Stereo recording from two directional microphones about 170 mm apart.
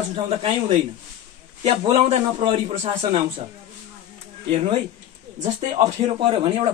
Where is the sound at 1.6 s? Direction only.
30° right (ahead or behind).